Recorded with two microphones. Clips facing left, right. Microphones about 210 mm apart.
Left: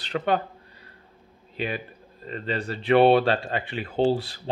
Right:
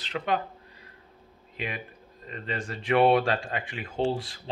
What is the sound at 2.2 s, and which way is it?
Speech, 35° left (ahead or behind).